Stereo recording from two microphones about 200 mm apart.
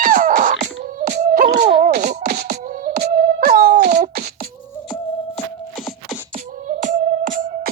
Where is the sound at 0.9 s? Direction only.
40° right (ahead or behind).